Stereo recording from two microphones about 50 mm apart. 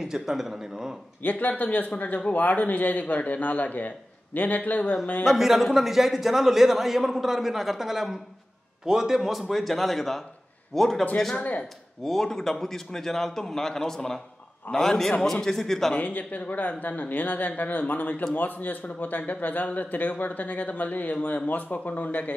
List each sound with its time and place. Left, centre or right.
0.0 s a man's voice: centre
1.2 s a man's voice: left
5.2 s a man's voice: centre
15.9 s a man's voice: left